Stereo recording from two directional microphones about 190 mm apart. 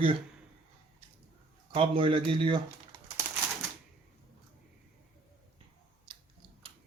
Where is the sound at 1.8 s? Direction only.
25° right (ahead or behind).